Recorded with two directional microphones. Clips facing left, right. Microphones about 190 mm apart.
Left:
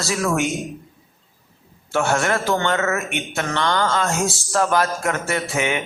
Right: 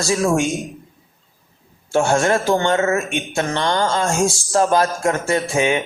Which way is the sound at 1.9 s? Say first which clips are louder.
Right 4 dB; 30° right (ahead or behind).